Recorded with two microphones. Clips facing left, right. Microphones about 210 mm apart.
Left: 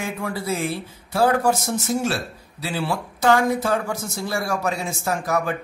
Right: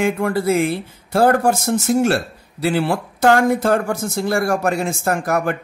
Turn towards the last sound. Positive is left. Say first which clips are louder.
# right 4 dB
turn(degrees=-55)  # may be behind; listen again after turning